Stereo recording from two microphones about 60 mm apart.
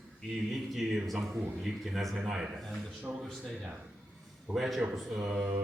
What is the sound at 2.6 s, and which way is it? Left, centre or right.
Speech, centre.